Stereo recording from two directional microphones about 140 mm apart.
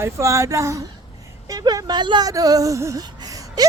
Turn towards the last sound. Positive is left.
turn(degrees=-30)  # may be behind; listen again after turning